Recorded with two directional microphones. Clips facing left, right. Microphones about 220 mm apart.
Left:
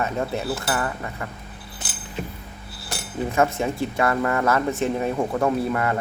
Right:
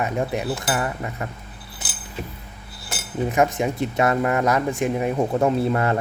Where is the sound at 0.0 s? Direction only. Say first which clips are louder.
Right 1 dB; 15° right (ahead or behind).